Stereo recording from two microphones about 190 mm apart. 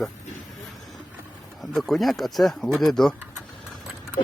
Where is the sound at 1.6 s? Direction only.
Centre (ahead or behind).